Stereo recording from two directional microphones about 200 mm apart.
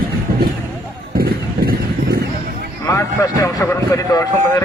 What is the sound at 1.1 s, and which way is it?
Music, 50° right (ahead or behind).